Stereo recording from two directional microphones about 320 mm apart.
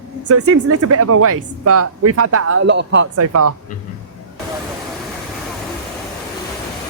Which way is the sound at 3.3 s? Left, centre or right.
Right.